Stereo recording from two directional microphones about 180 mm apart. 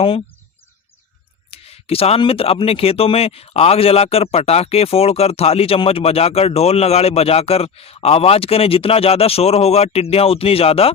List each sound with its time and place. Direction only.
1.5 s speech: 35° left (ahead or behind)